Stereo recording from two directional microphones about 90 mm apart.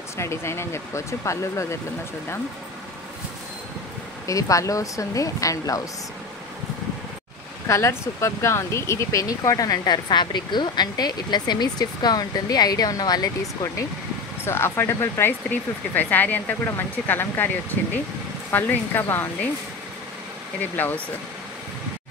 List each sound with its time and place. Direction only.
0.2 s speech: 30° left (ahead or behind)
4.3 s speech: 40° left (ahead or behind)
7.6 s speech: 35° left (ahead or behind)
14.4 s speech: 25° left (ahead or behind)
18.5 s speech: 20° left (ahead or behind)
20.7 s speech: 20° left (ahead or behind)